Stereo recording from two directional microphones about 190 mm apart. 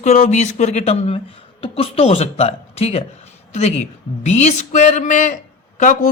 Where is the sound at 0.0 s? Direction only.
40° left (ahead or behind).